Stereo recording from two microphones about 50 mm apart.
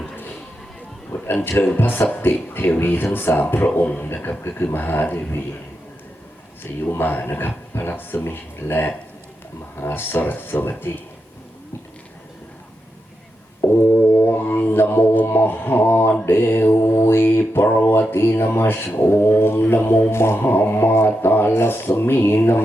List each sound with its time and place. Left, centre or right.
1.1 s speech: left
6.6 s speech: left
13.6 s a sound: left
14.3 s music: left
15.3 s mantra: left
18.1 s speech: left
18.9 s mantra: left
19.4 s speech: left